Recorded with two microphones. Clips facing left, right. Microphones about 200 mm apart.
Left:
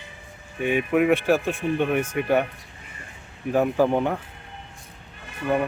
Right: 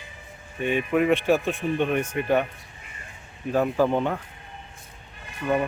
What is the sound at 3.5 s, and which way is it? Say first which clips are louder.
Speech: left 2 dB; 15° left (ahead or behind).